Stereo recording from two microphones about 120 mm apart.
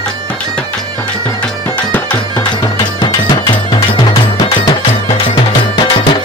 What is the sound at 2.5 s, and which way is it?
Music, 35° left (ahead or behind).